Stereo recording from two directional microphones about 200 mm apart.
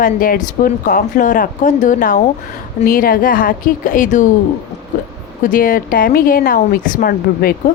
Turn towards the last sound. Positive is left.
turn(degrees=50)  # may be behind; listen again after turning